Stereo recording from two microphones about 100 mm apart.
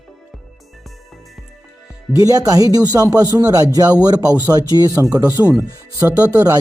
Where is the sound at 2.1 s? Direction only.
35° right (ahead or behind).